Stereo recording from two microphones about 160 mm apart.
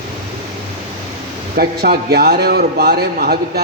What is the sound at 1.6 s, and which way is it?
A man's voice, 70° right (ahead or behind).